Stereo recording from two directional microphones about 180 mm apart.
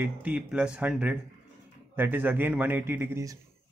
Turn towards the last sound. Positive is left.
turn(degrees=-15)  # may be behind; listen again after turning